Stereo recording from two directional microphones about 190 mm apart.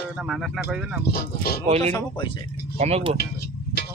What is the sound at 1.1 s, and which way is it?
Speech, 55° left (ahead or behind).